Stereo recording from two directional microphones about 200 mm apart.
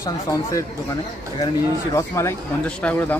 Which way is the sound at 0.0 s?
15° left (ahead or behind).